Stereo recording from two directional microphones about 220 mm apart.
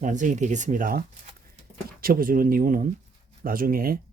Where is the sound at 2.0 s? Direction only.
40° right (ahead or behind).